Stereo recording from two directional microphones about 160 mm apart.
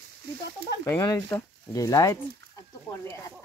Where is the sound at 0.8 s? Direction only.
15° left (ahead or behind).